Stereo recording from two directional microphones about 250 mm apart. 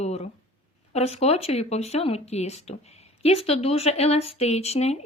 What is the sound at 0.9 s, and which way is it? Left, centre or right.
Speech, left.